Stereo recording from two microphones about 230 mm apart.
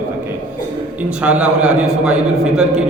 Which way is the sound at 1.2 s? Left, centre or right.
Centre.